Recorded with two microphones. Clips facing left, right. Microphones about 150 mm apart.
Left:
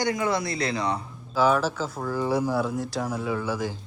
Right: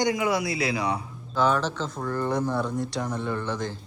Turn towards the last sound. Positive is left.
turn(degrees=5)  # may be behind; listen again after turning